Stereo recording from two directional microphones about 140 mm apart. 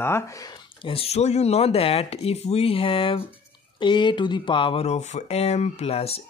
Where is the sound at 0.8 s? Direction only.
45° left (ahead or behind).